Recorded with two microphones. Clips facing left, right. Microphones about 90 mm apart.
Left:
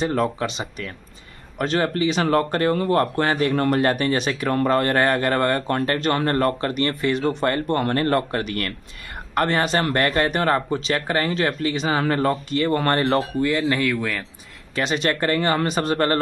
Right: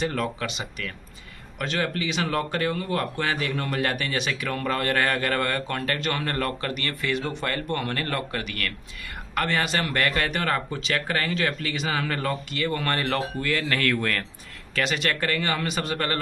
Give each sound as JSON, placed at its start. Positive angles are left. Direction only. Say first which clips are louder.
{"t": 0.0, "sound": "speech", "louder": "left 5 dB", "side_deg": 30}
{"t": 13.4, "sound": "speech", "louder": "left 6 dB", "side_deg": 20}
{"t": 13.8, "sound": "speech", "louder": "left 1 dB", "side_deg": 5}
{"t": 14.8, "sound": "speech", "louder": "left 4 dB", "side_deg": 30}